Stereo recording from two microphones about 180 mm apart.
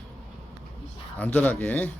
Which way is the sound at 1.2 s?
10° left (ahead or behind).